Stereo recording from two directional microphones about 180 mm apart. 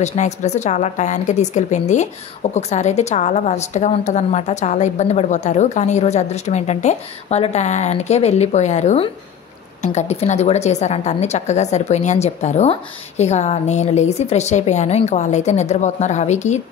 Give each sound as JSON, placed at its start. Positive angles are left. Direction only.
{"t": 0.0, "sound": "a woman's voice", "side_deg": 40}